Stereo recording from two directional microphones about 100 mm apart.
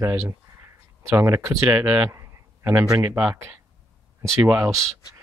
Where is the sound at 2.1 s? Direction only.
30° right (ahead or behind).